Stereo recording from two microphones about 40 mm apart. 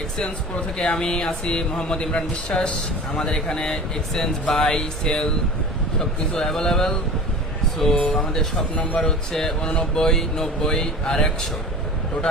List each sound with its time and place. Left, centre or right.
0.2 s speech: left
4.5 s speech: left